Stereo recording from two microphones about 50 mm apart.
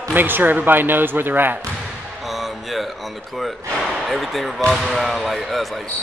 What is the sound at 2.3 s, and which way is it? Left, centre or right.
Music, centre.